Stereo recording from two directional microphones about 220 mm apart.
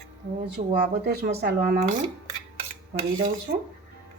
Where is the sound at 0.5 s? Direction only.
45° right (ahead or behind).